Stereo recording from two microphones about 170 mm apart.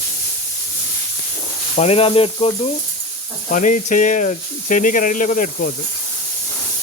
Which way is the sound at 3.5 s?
50° left (ahead or behind).